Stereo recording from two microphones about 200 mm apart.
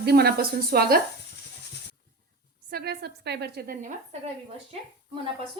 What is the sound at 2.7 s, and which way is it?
A woman's voice, 55° right (ahead or behind).